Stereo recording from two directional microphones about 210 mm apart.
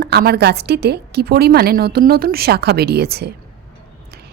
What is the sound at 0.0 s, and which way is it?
A woman's voice, 45° right (ahead or behind).